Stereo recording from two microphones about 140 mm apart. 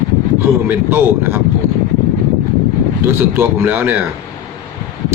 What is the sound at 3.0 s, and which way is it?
Speech, 15° right (ahead or behind).